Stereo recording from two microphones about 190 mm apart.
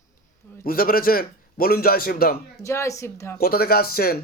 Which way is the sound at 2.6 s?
15° left (ahead or behind).